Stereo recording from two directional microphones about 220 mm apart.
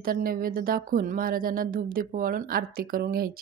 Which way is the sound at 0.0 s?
40° right (ahead or behind).